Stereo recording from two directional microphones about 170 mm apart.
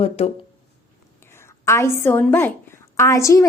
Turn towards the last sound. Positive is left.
turn(degrees=15)  # may be behind; listen again after turning